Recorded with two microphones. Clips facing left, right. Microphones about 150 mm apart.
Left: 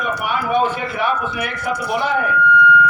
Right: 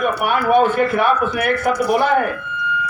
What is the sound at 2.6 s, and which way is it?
Music, 55° left (ahead or behind).